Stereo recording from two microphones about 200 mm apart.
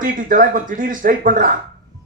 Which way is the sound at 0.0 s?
40° right (ahead or behind).